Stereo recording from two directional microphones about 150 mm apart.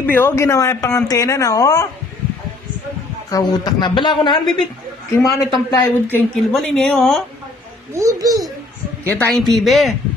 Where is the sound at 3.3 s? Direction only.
30° left (ahead or behind).